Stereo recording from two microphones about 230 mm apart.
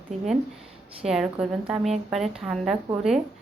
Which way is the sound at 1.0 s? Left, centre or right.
Centre.